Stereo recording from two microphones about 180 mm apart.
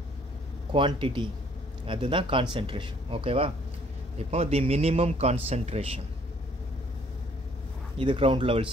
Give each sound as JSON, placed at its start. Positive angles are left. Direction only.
{"t": 0.7, "sound": "a man's voice", "side_deg": -30}
{"t": 8.0, "sound": "speech", "side_deg": -30}